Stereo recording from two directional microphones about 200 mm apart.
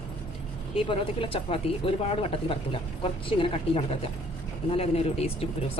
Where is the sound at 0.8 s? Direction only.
25° left (ahead or behind).